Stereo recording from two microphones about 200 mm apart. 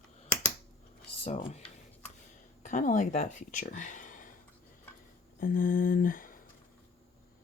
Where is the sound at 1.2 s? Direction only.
35° left (ahead or behind).